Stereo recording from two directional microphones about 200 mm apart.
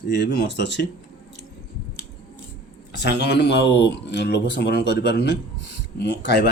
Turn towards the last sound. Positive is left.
turn(degrees=55)  # may be behind; listen again after turning